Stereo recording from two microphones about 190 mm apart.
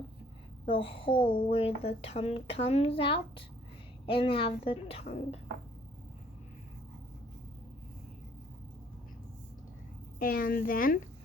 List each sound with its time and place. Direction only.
0.7 s a woman's voice: 30° left (ahead or behind)
10.2 s a woman's voice: 50° left (ahead or behind)